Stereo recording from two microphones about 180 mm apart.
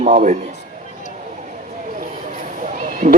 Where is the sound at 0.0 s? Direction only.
45° right (ahead or behind).